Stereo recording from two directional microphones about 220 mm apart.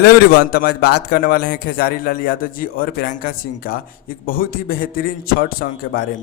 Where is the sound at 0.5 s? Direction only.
45° left (ahead or behind).